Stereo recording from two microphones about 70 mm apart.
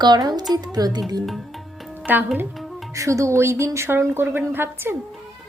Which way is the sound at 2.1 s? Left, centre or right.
Right.